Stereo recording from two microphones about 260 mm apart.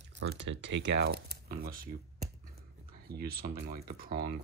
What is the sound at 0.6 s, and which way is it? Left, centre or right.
Speech, right.